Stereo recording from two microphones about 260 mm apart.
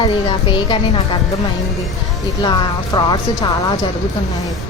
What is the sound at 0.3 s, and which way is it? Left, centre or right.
Speech, centre.